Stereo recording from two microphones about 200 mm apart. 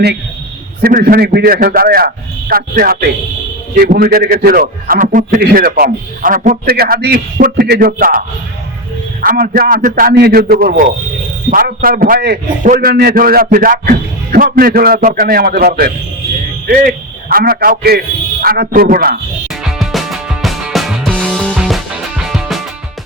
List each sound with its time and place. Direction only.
0.8 s a man's voice: 45° right (ahead or behind)
9.2 s a man's voice: 45° right (ahead or behind)
19.8 s music: centre (ahead or behind)